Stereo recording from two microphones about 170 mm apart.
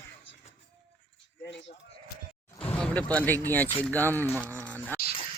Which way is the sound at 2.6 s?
5° left (ahead or behind).